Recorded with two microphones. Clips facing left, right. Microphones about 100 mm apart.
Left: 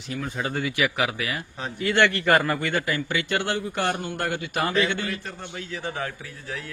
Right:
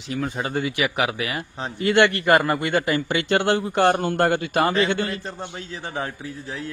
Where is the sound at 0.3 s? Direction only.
30° right (ahead or behind).